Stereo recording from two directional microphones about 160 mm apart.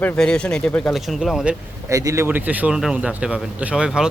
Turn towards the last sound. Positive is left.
turn(degrees=-5)  # may be behind; listen again after turning